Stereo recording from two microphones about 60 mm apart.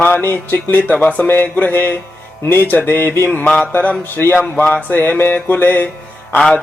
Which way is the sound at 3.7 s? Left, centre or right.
Left.